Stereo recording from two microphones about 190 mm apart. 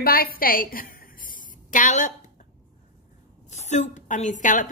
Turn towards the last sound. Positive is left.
turn(degrees=40)  # may be behind; listen again after turning